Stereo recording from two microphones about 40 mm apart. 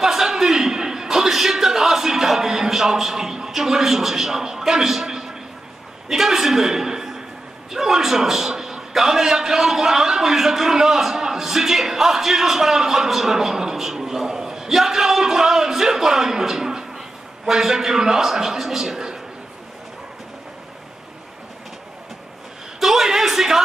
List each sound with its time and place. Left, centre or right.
0.0 s a sound: centre
6.0 s a man's voice: centre
22.8 s a man's voice: centre